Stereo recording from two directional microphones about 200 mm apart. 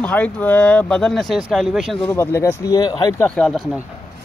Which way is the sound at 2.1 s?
15° left (ahead or behind).